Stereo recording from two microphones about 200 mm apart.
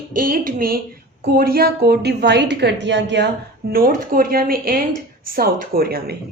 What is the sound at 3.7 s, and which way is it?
A woman's voice, 45° right (ahead or behind).